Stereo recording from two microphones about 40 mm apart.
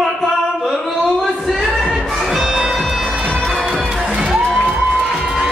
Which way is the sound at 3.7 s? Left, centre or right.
Right.